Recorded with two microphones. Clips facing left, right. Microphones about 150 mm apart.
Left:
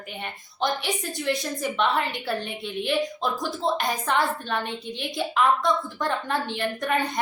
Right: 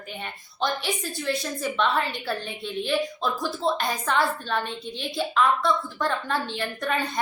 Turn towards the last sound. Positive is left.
turn(degrees=15)  # may be behind; listen again after turning